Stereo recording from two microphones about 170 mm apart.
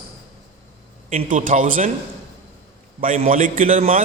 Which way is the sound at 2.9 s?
50° right (ahead or behind).